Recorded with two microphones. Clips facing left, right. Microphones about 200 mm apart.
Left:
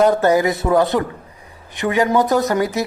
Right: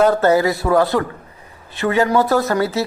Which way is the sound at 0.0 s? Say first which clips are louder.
Even; 15° left (ahead or behind).